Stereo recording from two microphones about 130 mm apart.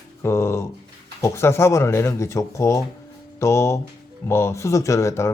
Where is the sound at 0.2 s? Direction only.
20° left (ahead or behind).